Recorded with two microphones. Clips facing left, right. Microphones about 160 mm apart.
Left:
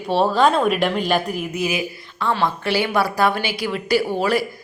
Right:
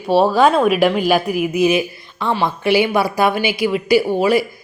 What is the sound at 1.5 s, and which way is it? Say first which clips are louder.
Speech: right 10 dB; 20° right (ahead or behind).